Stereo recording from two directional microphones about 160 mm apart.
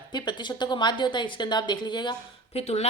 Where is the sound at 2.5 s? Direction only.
40° left (ahead or behind).